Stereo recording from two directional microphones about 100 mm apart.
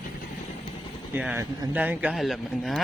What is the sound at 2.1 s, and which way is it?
Speech, centre (ahead or behind).